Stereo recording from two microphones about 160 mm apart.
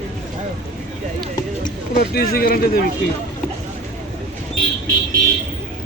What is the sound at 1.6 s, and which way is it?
Speech, 65° left (ahead or behind).